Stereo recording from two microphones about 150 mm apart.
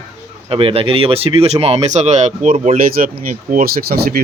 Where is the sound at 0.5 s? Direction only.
40° right (ahead or behind); by 3.1 s 60° right (ahead or behind).